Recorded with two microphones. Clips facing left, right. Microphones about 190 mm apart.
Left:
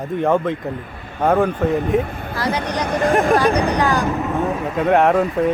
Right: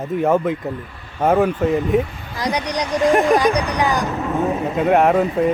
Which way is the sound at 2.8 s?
55° left (ahead or behind).